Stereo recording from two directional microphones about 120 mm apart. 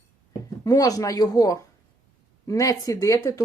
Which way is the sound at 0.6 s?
30° left (ahead or behind).